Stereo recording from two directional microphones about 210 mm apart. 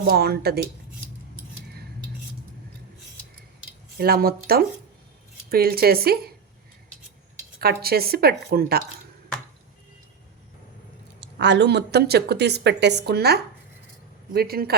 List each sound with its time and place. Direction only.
0.0 s speech: 50° right (ahead or behind)
3.9 s speech: 45° right (ahead or behind)
7.6 s speech: 45° right (ahead or behind)
11.2 s speech: 55° right (ahead or behind)